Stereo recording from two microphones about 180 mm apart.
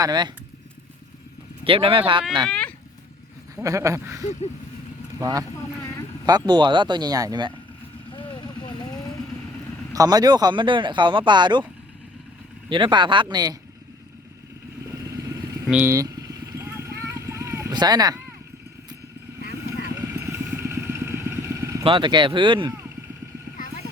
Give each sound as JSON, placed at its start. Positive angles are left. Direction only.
{"t": 0.0, "sound": "speech", "side_deg": -25}
{"t": 1.6, "sound": "speech", "side_deg": -30}
{"t": 2.5, "sound": "a sound", "side_deg": 5}
{"t": 3.5, "sound": "goat", "side_deg": -15}
{"t": 5.2, "sound": "speech", "side_deg": -20}
{"t": 8.1, "sound": "vehicle", "side_deg": 30}
{"t": 9.9, "sound": "speech", "side_deg": -20}
{"t": 12.6, "sound": "speech", "side_deg": -25}
{"t": 15.0, "sound": "vehicle", "side_deg": -20}
{"t": 15.6, "sound": "vehicle", "side_deg": -10}
{"t": 20.1, "sound": "vehicle", "side_deg": -15}
{"t": 21.8, "sound": "speech", "side_deg": -25}